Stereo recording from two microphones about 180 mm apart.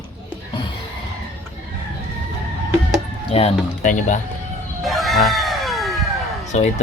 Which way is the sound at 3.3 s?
40° left (ahead or behind).